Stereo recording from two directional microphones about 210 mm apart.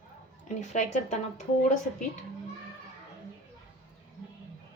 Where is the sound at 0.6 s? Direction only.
35° left (ahead or behind).